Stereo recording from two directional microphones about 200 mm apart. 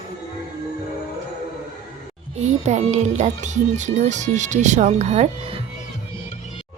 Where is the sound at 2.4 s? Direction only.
35° right (ahead or behind).